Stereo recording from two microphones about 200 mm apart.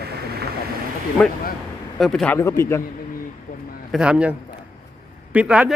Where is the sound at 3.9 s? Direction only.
5° right (ahead or behind).